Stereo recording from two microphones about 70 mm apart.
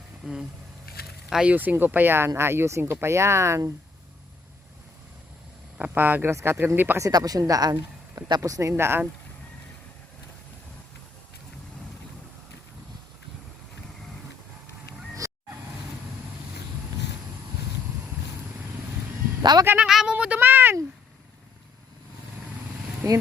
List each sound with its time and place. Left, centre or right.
0.2 s speech: centre
1.7 s speech: right
5.7 s speech: right
7.0 s speech: right
8.4 s speech: right
8.7 s speech: right
15.2 s honk: right
19.4 s speech: right
19.8 s speech: centre
20.1 s a sound: centre
20.4 s a sound: right
23.0 s speech: right